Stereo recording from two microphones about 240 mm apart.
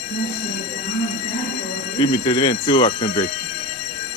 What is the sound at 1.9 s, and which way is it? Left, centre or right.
Speech, centre.